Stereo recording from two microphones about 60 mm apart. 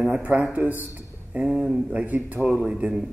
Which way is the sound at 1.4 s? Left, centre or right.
Centre.